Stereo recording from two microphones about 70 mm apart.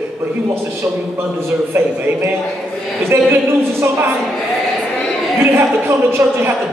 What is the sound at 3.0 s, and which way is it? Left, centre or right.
Speech, right.